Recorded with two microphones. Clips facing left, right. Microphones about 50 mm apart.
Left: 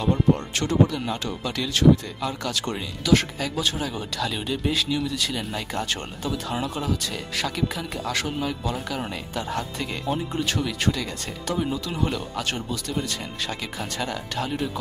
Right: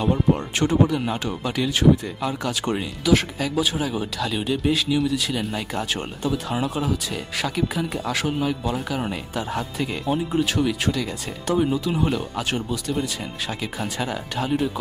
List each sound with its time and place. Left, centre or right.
0.0 s speech: centre
3.1 s speech: centre